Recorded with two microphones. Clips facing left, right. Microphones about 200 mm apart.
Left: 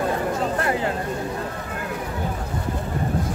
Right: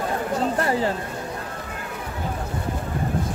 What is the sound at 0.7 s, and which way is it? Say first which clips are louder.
Speech: right 1 dB; 30° right (ahead or behind).